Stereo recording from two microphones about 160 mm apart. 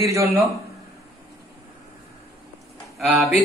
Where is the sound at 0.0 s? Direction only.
20° right (ahead or behind).